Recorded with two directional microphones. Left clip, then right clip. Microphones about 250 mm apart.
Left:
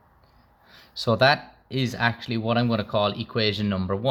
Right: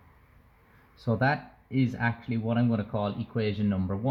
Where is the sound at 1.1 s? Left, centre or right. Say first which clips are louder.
Left 8 dB; left.